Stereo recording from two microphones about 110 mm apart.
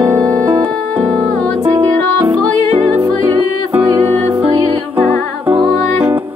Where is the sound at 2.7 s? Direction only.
20° right (ahead or behind).